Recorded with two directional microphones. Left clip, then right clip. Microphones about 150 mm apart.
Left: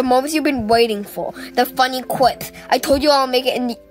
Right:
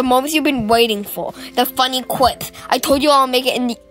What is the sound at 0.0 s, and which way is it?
Speech, 5° right (ahead or behind).